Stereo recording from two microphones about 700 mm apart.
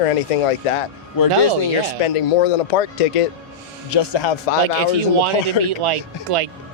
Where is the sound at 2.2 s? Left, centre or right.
Left.